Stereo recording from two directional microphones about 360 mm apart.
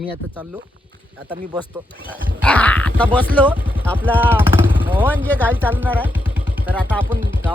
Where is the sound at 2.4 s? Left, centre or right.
Centre.